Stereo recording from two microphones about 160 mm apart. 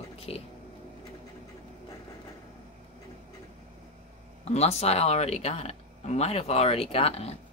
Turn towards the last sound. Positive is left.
turn(degrees=40)  # may be behind; listen again after turning